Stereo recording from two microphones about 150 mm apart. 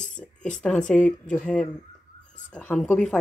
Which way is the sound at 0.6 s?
5° left (ahead or behind).